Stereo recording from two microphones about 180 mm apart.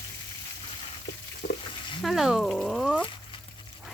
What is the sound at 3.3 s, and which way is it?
Dog, 30° left (ahead or behind).